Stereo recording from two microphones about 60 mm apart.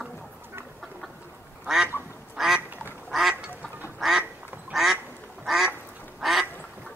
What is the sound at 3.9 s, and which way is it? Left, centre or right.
Duck, centre.